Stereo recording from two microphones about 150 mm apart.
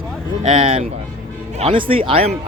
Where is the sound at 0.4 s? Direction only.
45° right (ahead or behind).